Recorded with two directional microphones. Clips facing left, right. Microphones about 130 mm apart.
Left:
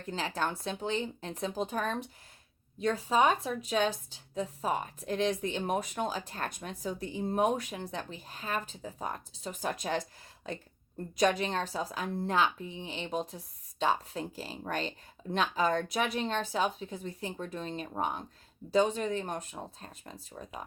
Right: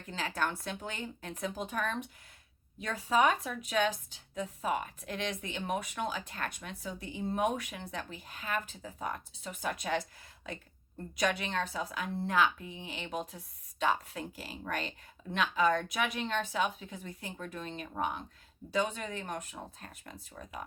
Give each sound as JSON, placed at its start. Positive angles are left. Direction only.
{"t": 0.0, "sound": "speech", "side_deg": 35}